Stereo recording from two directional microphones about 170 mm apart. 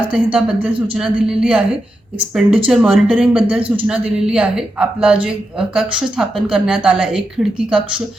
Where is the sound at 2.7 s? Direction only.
5° right (ahead or behind).